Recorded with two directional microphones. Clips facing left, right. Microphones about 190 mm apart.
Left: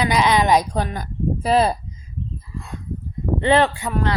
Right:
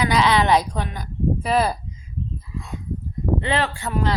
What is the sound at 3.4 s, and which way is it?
Speech, 35° left (ahead or behind).